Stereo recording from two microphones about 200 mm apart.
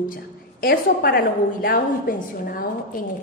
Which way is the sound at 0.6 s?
50° left (ahead or behind).